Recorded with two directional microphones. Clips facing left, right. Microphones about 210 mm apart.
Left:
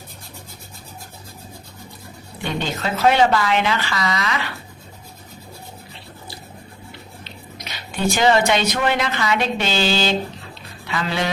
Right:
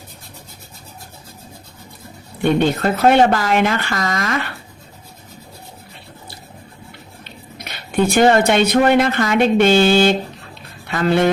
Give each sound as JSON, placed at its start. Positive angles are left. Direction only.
{"t": 2.4, "sound": "speech", "side_deg": -55}
{"t": 7.3, "sound": "speech", "side_deg": -55}